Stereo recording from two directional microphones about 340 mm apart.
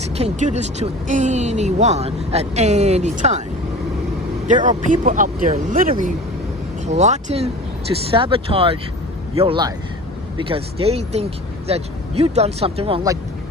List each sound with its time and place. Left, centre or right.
0.2 s speech: centre
4.4 s speech: right